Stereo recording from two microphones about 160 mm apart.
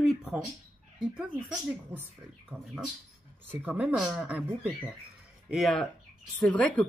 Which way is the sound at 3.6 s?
10° right (ahead or behind).